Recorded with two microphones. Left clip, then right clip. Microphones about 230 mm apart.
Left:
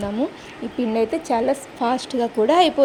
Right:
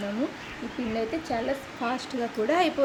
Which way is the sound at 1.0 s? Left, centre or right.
Left.